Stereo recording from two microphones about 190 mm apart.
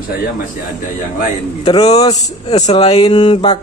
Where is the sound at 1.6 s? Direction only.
30° left (ahead or behind).